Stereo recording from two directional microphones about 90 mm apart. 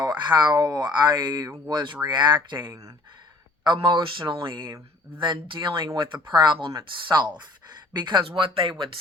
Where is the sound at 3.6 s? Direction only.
60° right (ahead or behind).